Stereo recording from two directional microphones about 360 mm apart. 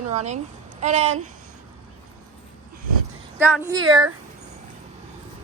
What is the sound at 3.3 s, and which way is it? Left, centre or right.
Speech, centre.